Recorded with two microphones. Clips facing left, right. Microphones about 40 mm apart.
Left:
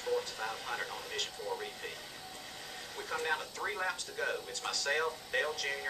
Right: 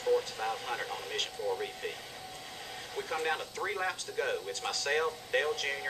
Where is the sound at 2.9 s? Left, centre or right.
Centre.